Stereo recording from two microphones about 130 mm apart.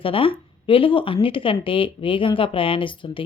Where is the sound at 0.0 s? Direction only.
45° left (ahead or behind).